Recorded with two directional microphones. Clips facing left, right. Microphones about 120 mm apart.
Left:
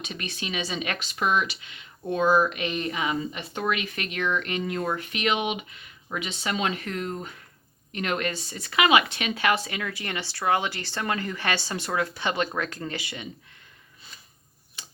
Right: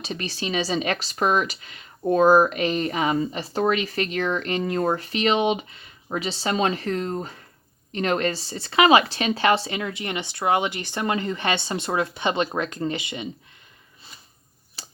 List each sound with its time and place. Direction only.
0.0 s speech: 35° right (ahead or behind)
14.8 s tick-tock: 35° right (ahead or behind)